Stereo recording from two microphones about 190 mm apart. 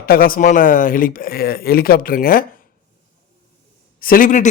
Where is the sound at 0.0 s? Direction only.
50° left (ahead or behind).